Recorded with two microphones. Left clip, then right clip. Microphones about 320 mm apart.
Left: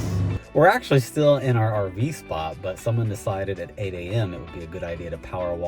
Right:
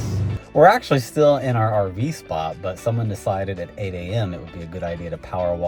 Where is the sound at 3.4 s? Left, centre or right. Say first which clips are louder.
Right 1 dB; centre.